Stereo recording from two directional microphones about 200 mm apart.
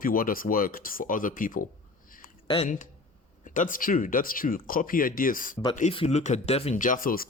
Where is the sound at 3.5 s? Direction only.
40° left (ahead or behind).